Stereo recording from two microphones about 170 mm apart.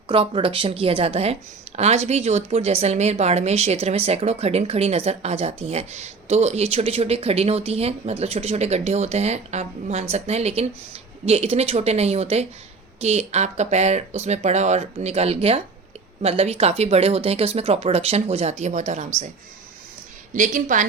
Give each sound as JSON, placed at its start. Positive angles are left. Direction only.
{"t": 0.1, "sound": "speech", "side_deg": -30}
{"t": 20.3, "sound": "a woman's voice", "side_deg": -45}